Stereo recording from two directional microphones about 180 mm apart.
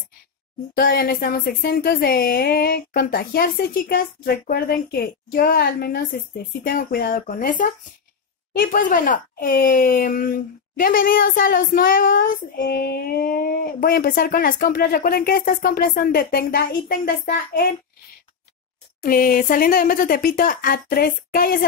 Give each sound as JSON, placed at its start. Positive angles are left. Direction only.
{"t": 0.7, "sound": "speech", "side_deg": 55}
{"t": 19.0, "sound": "speech", "side_deg": 50}